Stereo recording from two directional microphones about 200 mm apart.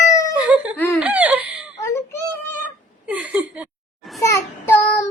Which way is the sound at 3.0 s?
5° right (ahead or behind).